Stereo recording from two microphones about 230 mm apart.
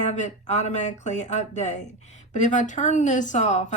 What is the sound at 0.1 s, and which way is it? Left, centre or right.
Speech, left.